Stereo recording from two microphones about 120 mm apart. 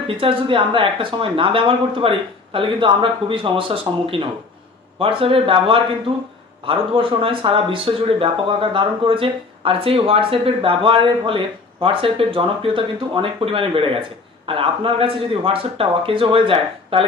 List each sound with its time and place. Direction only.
0.2 s speech: 45° right (ahead or behind)